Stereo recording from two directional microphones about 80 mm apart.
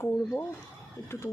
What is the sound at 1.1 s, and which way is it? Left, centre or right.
Speech, left.